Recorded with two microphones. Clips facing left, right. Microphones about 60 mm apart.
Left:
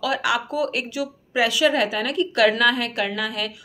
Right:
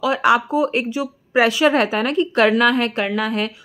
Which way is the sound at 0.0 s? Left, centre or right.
Right.